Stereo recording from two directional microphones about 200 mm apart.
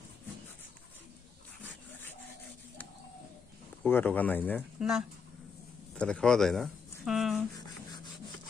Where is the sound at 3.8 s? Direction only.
10° left (ahead or behind).